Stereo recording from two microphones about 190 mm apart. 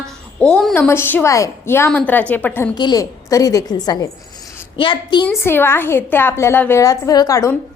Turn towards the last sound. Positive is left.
turn(degrees=15)  # may be behind; listen again after turning